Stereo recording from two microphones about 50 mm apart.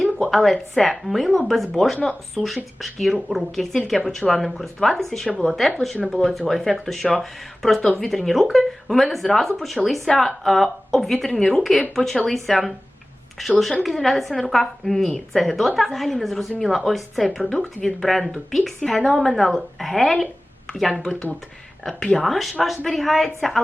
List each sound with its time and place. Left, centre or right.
0.0 s a sound: centre
0.7 s speech: centre
8.5 s a sound: centre
9.1 s speech: centre
13.8 s speech: centre
21.0 s speech: centre